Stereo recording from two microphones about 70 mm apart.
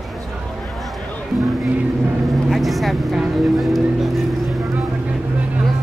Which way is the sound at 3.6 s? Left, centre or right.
Centre.